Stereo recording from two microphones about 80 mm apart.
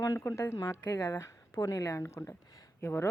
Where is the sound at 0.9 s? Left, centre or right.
Left.